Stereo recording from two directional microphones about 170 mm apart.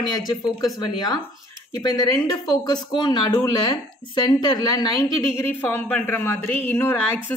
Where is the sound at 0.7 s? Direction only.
20° left (ahead or behind).